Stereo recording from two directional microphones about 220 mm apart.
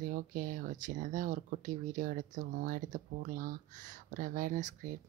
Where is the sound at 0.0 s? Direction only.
40° right (ahead or behind).